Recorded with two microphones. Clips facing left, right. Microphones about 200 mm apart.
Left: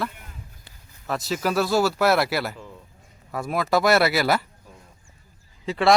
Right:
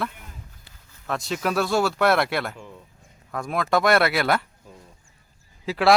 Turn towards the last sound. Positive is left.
turn(degrees=0)  # may be behind; listen again after turning